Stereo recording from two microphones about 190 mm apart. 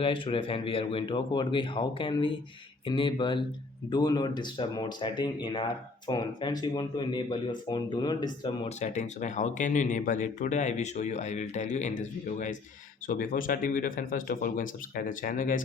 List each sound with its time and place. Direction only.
0.0 s speech: 30° left (ahead or behind)
8.8 s a man's voice: 40° left (ahead or behind)